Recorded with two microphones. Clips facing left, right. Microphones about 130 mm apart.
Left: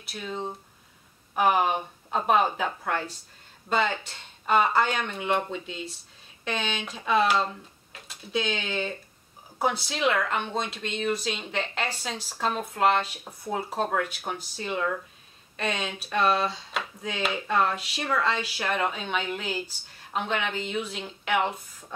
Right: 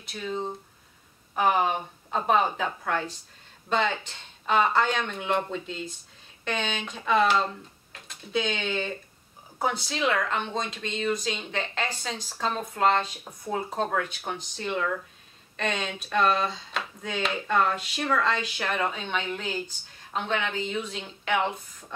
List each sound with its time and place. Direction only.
0.0 s speech: 5° left (ahead or behind)